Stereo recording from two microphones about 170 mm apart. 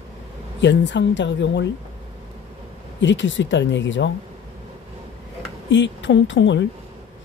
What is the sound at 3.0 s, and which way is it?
A woman's voice, 90° left.